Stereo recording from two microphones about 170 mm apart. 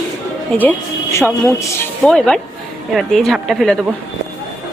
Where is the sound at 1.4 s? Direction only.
15° left (ahead or behind).